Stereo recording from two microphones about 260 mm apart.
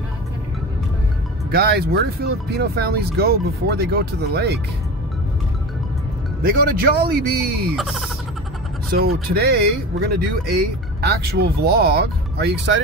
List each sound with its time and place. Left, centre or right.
1.5 s speech: right
6.6 s speech: right
7.7 s speech: centre
8.9 s speech: right